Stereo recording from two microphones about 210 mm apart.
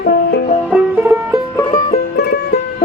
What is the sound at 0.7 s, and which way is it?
Music, 10° right (ahead or behind).